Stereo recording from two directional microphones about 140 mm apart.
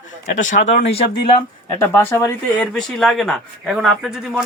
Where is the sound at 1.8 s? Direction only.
15° left (ahead or behind).